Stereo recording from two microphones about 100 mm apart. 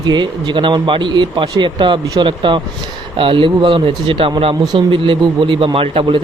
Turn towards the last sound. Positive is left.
turn(degrees=-60)  # may be behind; listen again after turning